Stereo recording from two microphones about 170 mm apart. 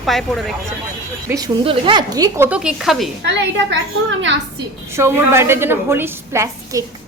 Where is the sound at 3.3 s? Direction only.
90° right.